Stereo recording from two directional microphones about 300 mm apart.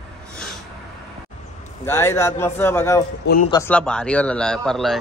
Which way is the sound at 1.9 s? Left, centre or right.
Centre.